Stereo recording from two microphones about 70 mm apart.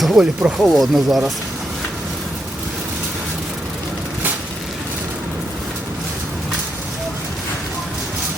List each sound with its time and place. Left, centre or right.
0.0 s speech: centre